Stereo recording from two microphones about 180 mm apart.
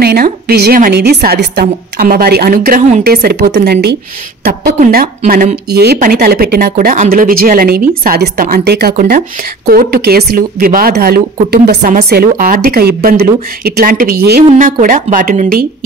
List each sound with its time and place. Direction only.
0.0 s a woman's voice: 60° right (ahead or behind)
4.5 s a woman's voice: 50° right (ahead or behind)